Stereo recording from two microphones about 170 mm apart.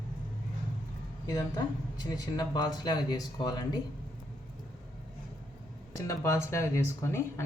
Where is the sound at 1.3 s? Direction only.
20° left (ahead or behind).